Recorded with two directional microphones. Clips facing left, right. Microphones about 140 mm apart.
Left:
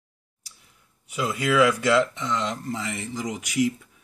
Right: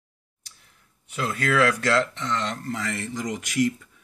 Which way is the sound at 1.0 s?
10° left (ahead or behind).